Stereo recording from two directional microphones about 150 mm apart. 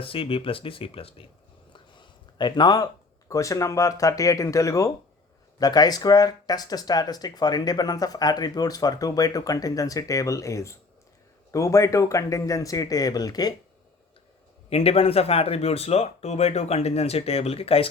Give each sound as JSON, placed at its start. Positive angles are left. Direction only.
{"t": 0.0, "sound": "speech", "side_deg": 35}
{"t": 14.7, "sound": "speech", "side_deg": 40}